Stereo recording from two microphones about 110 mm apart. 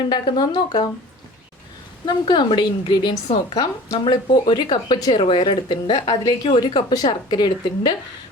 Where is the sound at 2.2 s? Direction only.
45° left (ahead or behind).